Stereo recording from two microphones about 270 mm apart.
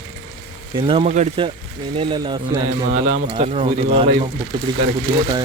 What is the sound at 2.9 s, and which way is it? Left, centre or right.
Speech, right.